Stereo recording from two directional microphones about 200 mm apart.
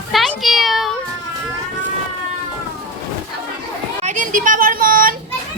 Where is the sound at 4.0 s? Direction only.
40° right (ahead or behind).